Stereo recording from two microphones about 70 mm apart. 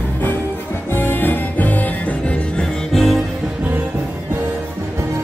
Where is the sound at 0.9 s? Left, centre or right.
Left.